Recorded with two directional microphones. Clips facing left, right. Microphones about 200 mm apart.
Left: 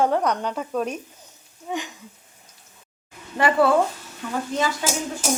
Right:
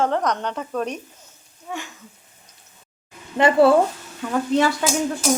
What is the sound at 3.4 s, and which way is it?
Speech, 25° right (ahead or behind).